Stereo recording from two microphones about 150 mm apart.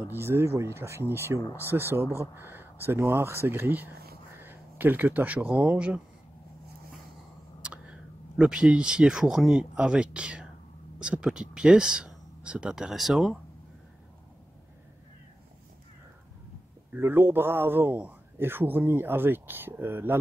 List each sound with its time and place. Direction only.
0.2 s a man's voice: 15° right (ahead or behind)
1.4 s speech: 20° left (ahead or behind)
1.7 s a man's voice: 15° right (ahead or behind)
8.4 s speech: 5° right (ahead or behind)
16.9 s a man's voice: 15° right (ahead or behind)